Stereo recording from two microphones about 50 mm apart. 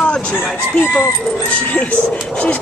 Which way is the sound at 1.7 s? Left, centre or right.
Left.